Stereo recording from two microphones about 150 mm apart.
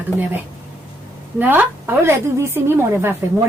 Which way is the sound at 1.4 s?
10° right (ahead or behind).